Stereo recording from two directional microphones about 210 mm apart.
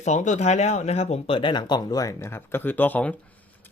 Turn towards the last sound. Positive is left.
turn(degrees=5)  # may be behind; listen again after turning